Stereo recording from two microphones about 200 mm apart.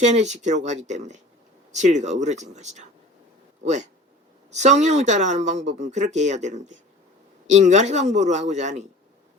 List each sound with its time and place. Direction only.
0.0 s speech: 35° right (ahead or behind)